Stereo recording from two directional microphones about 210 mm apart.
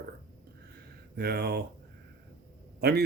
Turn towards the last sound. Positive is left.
turn(degrees=-50)  # may be behind; listen again after turning